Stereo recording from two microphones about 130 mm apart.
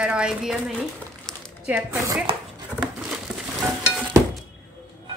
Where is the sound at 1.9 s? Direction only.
25° right (ahead or behind).